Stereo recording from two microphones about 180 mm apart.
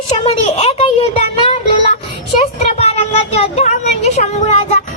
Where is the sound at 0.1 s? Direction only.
35° left (ahead or behind).